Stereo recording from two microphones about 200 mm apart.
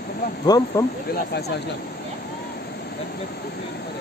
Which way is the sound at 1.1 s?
55° left (ahead or behind).